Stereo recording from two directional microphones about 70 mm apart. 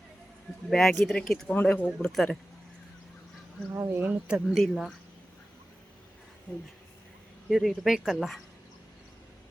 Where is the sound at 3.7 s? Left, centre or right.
Right.